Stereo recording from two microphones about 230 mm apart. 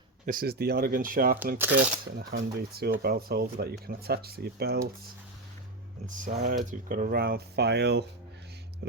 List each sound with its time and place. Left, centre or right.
0.3 s speech: right
1.5 s speech: centre
2.0 s speech: right
6.1 s speech: right
8.8 s music: right